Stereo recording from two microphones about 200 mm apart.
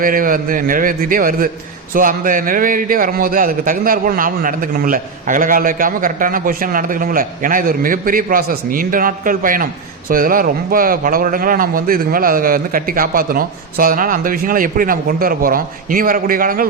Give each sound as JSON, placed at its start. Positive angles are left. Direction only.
{"t": 0.0, "sound": "a man's voice", "side_deg": -45}